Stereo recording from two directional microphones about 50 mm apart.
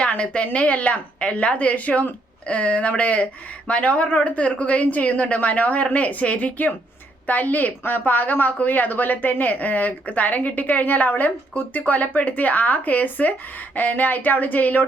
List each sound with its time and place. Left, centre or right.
0.0 s a woman's voice: left